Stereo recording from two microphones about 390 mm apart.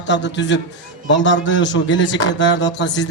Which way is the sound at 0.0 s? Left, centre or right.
Left.